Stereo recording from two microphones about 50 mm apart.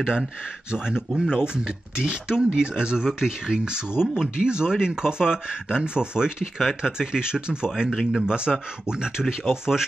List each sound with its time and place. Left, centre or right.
0.0 s speech: centre
9.2 s speech: centre